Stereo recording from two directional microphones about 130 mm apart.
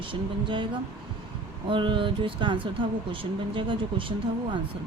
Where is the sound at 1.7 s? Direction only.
40° right (ahead or behind).